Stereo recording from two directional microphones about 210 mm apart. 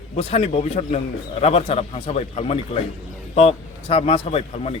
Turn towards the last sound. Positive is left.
turn(degrees=30)  # may be behind; listen again after turning